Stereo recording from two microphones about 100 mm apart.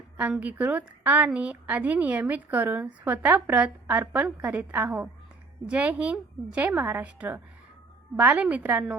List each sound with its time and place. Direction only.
0.2 s a woman's voice: 15° right (ahead or behind)